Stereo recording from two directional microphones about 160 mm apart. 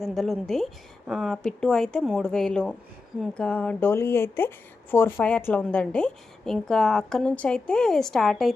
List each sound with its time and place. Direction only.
0.0 s a woman's voice: centre (ahead or behind)